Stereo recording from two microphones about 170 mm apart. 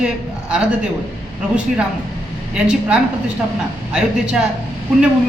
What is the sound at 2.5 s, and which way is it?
A man's voice, 5° right (ahead or behind).